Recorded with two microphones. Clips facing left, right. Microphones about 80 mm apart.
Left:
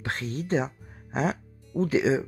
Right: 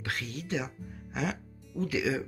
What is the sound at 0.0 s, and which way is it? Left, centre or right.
Speech, left.